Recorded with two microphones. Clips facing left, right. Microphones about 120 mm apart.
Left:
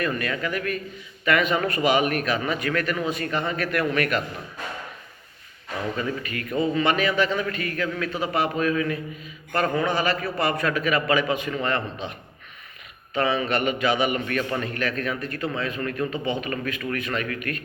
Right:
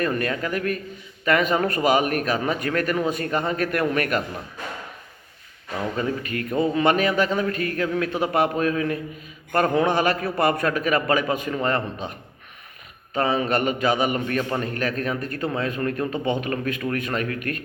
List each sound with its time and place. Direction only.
0.0 s a man's voice: 40° right (ahead or behind)
6.0 s a man's voice: 45° right (ahead or behind)
13.1 s a man's voice: 40° right (ahead or behind)
16.1 s a man's voice: 55° right (ahead or behind)